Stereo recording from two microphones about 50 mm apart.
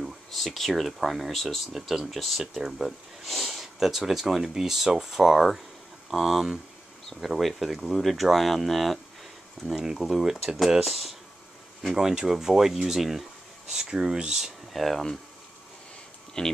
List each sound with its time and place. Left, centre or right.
0.0 s speech: centre
14.7 s speech: centre
16.4 s speech: centre